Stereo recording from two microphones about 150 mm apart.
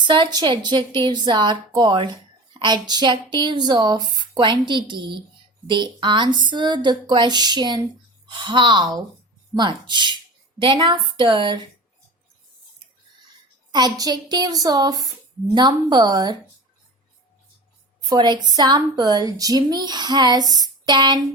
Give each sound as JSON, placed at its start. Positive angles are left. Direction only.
{"t": 0.1, "sound": "a woman's voice", "side_deg": -30}
{"t": 13.7, "sound": "a woman's voice", "side_deg": -25}
{"t": 18.1, "sound": "a woman's voice", "side_deg": -30}
{"t": 20.5, "sound": "a sound", "side_deg": -25}